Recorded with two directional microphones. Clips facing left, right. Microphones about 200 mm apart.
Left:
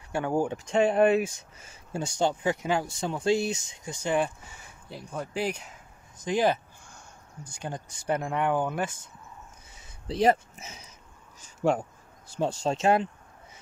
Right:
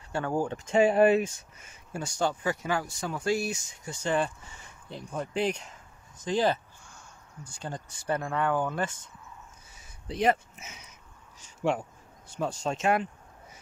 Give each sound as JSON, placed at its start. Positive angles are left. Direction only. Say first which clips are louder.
{"t": 0.1, "sound": "speech", "louder": "left 2 dB", "side_deg": 15}
{"t": 0.7, "sound": "speech", "louder": "right 1 dB", "side_deg": -5}
{"t": 1.6, "sound": "speech", "louder": "left 3 dB", "side_deg": 30}
{"t": 10.0, "sound": "speech", "louder": "left 3 dB", "side_deg": 35}
{"t": 12.3, "sound": "speech", "louder": "left 3 dB", "side_deg": 30}